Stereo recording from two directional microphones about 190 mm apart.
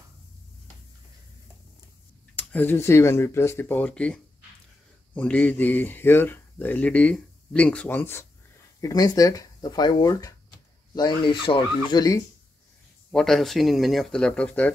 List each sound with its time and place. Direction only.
2.3 s speech: 10° left (ahead or behind)
13.1 s speech: centre (ahead or behind)